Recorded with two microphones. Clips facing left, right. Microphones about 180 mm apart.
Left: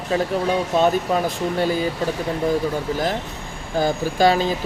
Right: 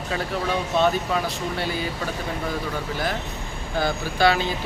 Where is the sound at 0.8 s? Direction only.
45° left (ahead or behind).